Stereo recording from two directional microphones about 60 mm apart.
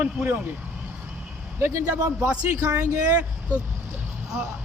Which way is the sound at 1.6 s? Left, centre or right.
Right.